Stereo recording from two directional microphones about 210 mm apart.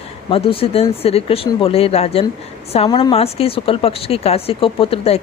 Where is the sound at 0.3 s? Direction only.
25° left (ahead or behind).